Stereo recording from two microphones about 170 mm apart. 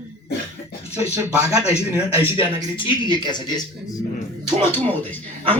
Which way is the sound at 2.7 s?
30° left (ahead or behind).